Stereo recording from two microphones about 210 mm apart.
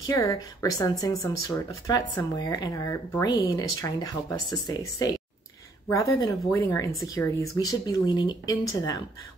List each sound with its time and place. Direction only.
0.0 s speech: 15° left (ahead or behind)
6.2 s speech: 15° left (ahead or behind)